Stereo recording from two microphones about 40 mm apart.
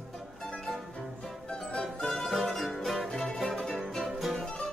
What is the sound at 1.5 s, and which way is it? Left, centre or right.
Music, centre.